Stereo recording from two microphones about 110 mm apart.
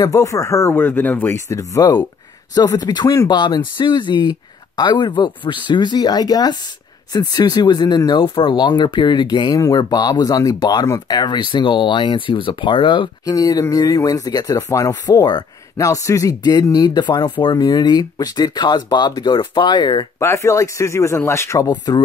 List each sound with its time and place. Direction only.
0.0 s speech: 30° left (ahead or behind)
1.5 s speech: 30° left (ahead or behind); by 13.1 s 45° left (ahead or behind)
13.2 s speech: 35° left (ahead or behind)
20.2 s speech: 25° left (ahead or behind)